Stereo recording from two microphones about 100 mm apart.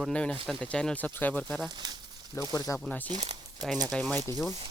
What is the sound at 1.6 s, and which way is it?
Speech, 45° right (ahead or behind).